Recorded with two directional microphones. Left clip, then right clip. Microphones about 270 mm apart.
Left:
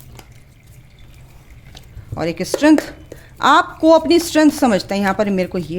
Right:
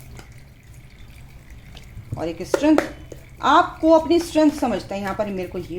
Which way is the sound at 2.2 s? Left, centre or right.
Left.